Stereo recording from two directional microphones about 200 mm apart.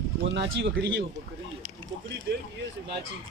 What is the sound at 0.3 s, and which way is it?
Speech, 60° right (ahead or behind).